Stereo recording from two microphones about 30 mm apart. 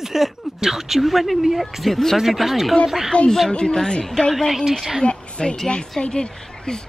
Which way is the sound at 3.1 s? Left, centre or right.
Left.